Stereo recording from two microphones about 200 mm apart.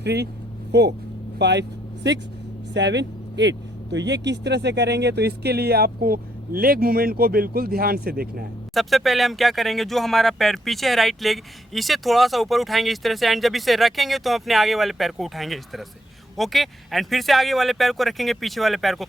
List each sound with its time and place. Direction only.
0.0 s speech: 55° right (ahead or behind)
2.7 s speech: 60° right (ahead or behind)
8.7 s speech: centre (ahead or behind)